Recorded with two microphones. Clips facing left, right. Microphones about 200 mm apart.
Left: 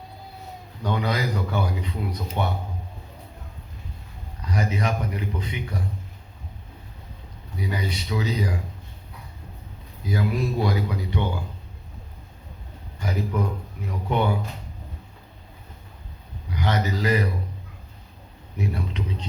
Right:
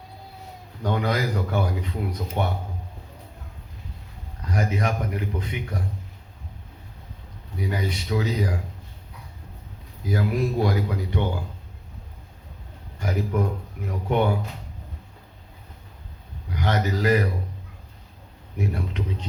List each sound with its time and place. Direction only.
0.8 s speech: 50° right (ahead or behind)
4.4 s speech: 50° right (ahead or behind)
7.5 s speech: 50° right (ahead or behind)
10.1 s speech: 50° right (ahead or behind)
13.0 s speech: 50° right (ahead or behind)
16.5 s a man's voice: 50° right (ahead or behind)
18.5 s speech: 50° right (ahead or behind)